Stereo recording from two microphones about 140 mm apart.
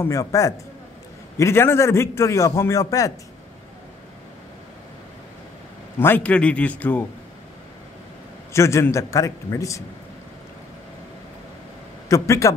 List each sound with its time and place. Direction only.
0.0 s a man's voice: 20° left (ahead or behind)
5.9 s a man's voice: 15° left (ahead or behind)
8.5 s a man's voice: 20° left (ahead or behind)
12.1 s a man's voice: 20° left (ahead or behind)